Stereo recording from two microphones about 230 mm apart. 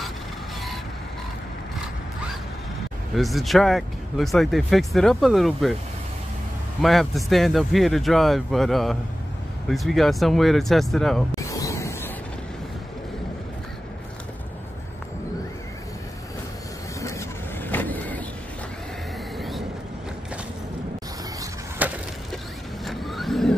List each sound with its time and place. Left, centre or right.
3.2 s speech: centre
6.8 s speech: centre
11.4 s a sound: centre
17.6 s vehicle: centre
19.3 s vehicle: centre
21.4 s a sound: centre
22.8 s vehicle: centre